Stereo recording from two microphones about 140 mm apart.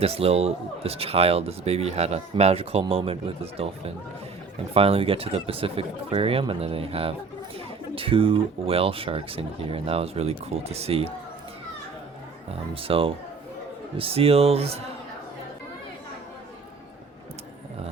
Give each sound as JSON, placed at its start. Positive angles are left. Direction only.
{"t": 0.0, "sound": "speech", "side_deg": -45}
{"t": 12.7, "sound": "speech", "side_deg": -40}